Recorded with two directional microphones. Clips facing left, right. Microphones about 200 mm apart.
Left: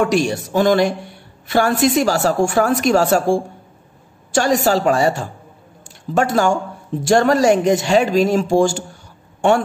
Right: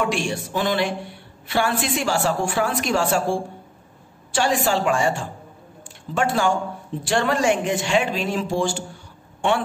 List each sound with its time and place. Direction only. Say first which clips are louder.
0.0 s a woman's voice: left 7 dB; 40° left (ahead or behind)